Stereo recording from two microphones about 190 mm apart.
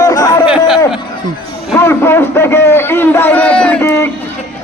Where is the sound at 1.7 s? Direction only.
15° left (ahead or behind).